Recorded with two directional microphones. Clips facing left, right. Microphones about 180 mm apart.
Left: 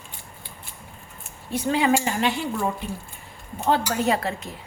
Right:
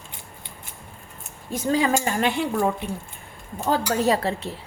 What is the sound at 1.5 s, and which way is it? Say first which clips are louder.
Speech: even; 40° right (ahead or behind).